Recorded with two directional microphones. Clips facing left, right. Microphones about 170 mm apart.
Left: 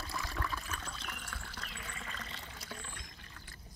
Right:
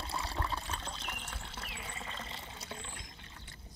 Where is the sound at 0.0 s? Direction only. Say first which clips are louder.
Right 2 dB; 30° right (ahead or behind).